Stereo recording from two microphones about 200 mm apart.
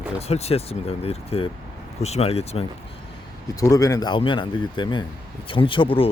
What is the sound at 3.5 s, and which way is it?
Speech, 15° left (ahead or behind).